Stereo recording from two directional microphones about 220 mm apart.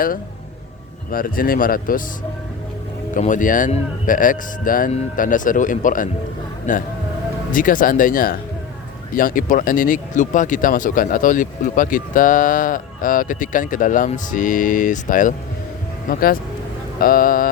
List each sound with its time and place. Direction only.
1.1 s speech: 40° left (ahead or behind)
3.2 s speech: 35° left (ahead or behind)